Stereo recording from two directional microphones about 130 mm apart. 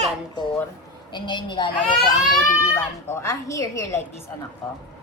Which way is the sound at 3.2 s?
25° left (ahead or behind).